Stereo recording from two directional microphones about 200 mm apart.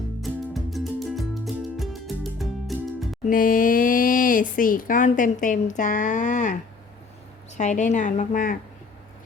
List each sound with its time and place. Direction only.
0.2 s music: centre (ahead or behind)
3.2 s a woman's voice: 45° left (ahead or behind)